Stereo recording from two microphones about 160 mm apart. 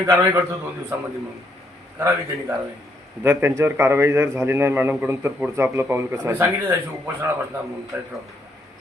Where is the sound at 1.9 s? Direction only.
15° right (ahead or behind).